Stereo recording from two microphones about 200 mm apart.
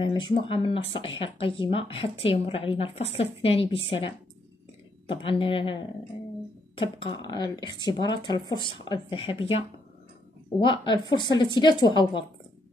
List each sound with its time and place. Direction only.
0.0 s speech: 25° left (ahead or behind)
5.2 s speech: 25° left (ahead or behind)
7.0 s speech: 25° left (ahead or behind)